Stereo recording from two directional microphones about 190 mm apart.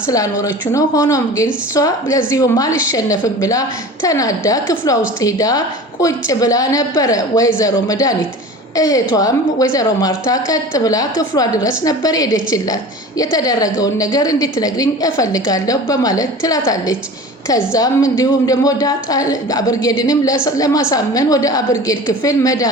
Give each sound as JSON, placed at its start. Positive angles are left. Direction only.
{"t": 0.1, "sound": "a woman's voice", "side_deg": 20}